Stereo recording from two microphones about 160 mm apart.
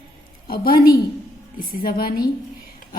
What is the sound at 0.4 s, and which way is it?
A woman's voice, 65° left (ahead or behind).